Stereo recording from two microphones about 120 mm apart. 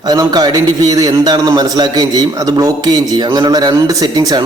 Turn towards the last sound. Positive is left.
turn(degrees=-30)  # may be behind; listen again after turning